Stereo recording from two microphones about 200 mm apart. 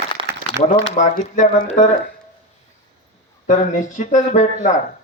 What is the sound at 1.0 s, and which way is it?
Speech, 40° left (ahead or behind).